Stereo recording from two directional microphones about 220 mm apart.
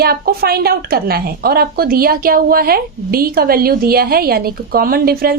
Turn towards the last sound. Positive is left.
turn(degrees=-45)  # may be behind; listen again after turning